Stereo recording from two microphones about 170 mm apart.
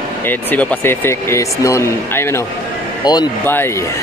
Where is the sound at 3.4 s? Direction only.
10° left (ahead or behind).